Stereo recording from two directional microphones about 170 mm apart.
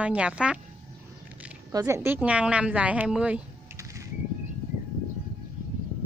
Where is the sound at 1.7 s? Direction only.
20° right (ahead or behind).